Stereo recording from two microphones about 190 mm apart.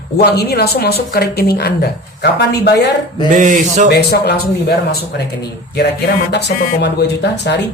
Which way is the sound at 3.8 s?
60° left (ahead or behind).